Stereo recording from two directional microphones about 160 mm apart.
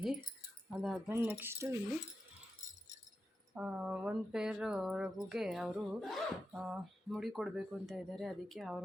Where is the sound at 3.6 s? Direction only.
5° right (ahead or behind).